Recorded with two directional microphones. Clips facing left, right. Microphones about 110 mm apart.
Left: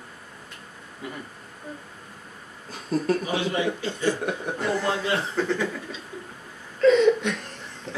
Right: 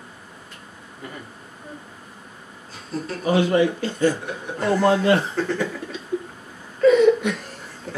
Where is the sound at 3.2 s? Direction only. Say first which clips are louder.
Right 7 dB; 50° right (ahead or behind).